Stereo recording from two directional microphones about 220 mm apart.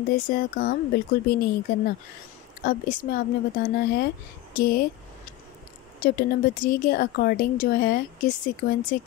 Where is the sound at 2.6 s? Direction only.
40° left (ahead or behind).